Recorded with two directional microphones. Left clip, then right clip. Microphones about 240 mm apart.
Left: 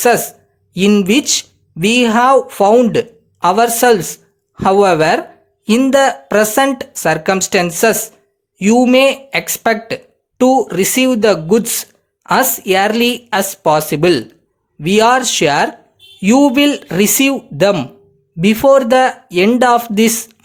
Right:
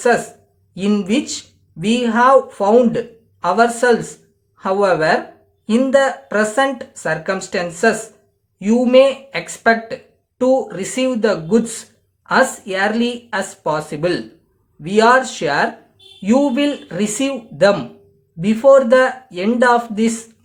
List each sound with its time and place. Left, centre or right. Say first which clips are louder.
0.7 s speech: left 7 dB; left